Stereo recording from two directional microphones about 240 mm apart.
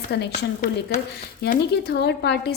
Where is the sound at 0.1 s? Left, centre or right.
Left.